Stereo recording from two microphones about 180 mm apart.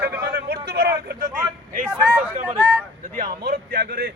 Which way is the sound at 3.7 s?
60° right (ahead or behind).